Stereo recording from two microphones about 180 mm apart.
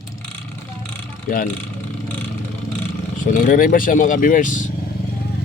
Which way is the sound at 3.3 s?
50° left (ahead or behind).